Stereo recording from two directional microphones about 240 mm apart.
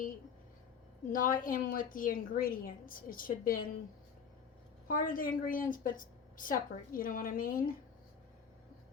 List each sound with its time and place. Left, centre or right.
1.1 s a woman's voice: left
4.9 s a woman's voice: left